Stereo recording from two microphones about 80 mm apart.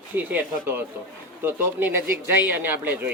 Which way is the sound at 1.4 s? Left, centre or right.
Right.